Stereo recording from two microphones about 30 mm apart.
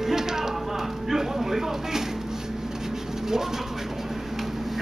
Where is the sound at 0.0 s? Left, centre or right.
Centre.